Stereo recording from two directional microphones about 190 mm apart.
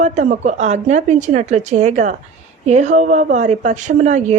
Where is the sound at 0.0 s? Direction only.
40° right (ahead or behind).